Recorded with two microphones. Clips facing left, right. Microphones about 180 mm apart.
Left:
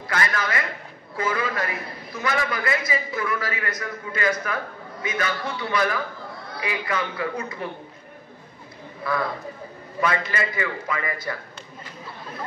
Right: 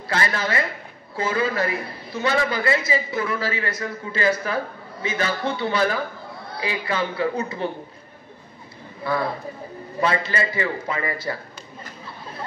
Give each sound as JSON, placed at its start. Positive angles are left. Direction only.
{"t": 0.1, "sound": "a man's voice", "side_deg": -30}
{"t": 9.1, "sound": "a man's voice", "side_deg": -25}